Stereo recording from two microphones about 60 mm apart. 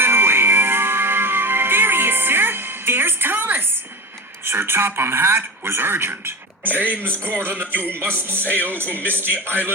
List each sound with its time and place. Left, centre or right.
0.0 s music: right
4.4 s a man's voice: right